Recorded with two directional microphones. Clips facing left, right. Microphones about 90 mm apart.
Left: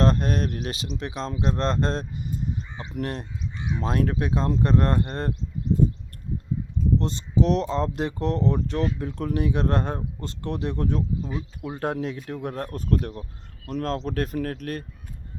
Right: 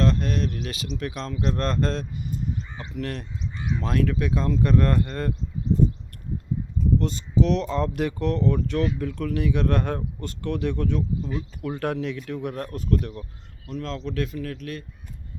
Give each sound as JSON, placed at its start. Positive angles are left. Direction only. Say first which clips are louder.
{"t": 0.0, "sound": "speech", "louder": "left 1 dB", "side_deg": 40}
{"t": 7.0, "sound": "speech", "louder": "even", "side_deg": 30}
{"t": 11.2, "sound": "speech", "louder": "right 1 dB", "side_deg": 10}
{"t": 11.7, "sound": "speech", "louder": "even", "side_deg": 25}